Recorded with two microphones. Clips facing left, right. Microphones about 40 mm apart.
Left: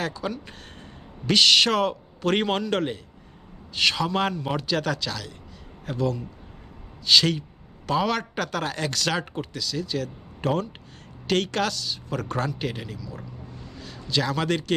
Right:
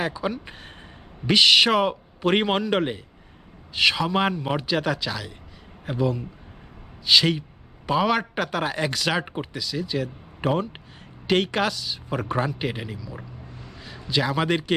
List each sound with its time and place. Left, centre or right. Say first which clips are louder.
0.0 s a man's voice: right 3 dB; centre